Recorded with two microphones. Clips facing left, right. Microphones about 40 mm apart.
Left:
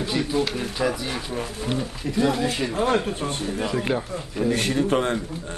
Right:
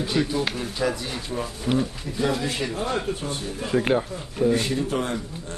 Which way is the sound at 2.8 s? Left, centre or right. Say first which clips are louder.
Left 8 dB; left.